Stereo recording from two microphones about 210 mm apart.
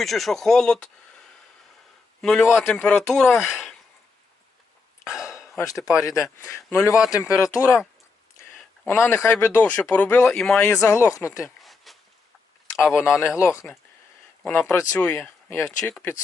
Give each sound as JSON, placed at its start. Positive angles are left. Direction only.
{"t": 0.0, "sound": "speech", "side_deg": 0}
{"t": 2.2, "sound": "speech", "side_deg": 0}
{"t": 5.5, "sound": "speech", "side_deg": 15}
{"t": 8.5, "sound": "speech", "side_deg": 0}
{"t": 11.6, "sound": "a sound", "side_deg": 0}
{"t": 12.9, "sound": "speech", "side_deg": 15}